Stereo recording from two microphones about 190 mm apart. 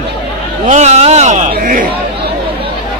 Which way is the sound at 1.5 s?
45° right (ahead or behind).